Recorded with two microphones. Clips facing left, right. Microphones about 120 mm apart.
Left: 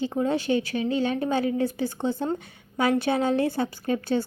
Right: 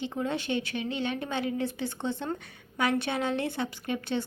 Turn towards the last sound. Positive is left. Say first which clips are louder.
# left 6 dB
turn(degrees=35)  # may be behind; listen again after turning